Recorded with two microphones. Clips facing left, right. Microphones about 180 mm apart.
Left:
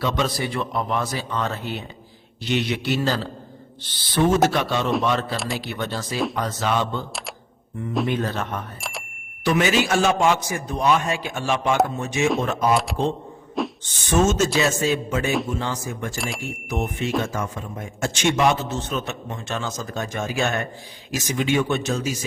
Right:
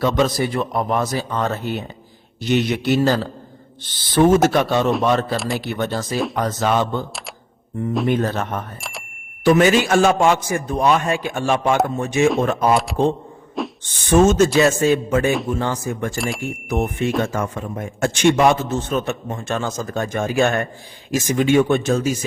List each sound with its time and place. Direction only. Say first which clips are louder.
0.0 s a man's voice: right 6 dB; 45° right (ahead or behind)
8.0 s a man's voice: right 5 dB; 45° right (ahead or behind)
8.8 s a sound: even; centre (ahead or behind)
9.4 s a man's voice: right 6 dB; 50° right (ahead or behind)
12.7 s speech: right 3 dB; centre (ahead or behind)
13.6 s a sound: even; centre (ahead or behind)
14.1 s a man's voice: right 6 dB; 55° right (ahead or behind)
16.1 s speech: right 5 dB; centre (ahead or behind)
16.6 s a man's voice: right 5 dB; 55° right (ahead or behind)